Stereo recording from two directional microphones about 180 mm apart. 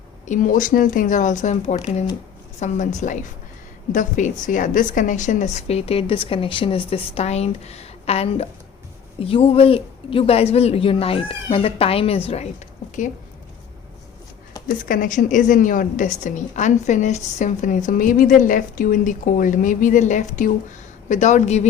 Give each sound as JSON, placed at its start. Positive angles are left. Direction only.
{"t": 0.3, "sound": "a woman's voice", "side_deg": 45}
{"t": 14.8, "sound": "a woman's voice", "side_deg": 45}